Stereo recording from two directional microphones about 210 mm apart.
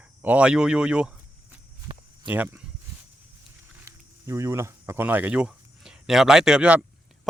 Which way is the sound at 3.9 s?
15° right (ahead or behind).